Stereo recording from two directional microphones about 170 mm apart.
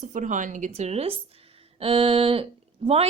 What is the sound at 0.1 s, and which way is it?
A woman's voice, 50° right (ahead or behind).